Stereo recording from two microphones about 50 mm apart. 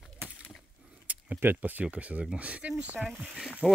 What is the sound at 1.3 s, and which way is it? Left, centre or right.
Speech, right.